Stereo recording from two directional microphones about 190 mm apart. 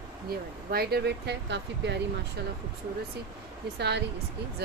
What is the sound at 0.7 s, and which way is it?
Speech, 55° right (ahead or behind).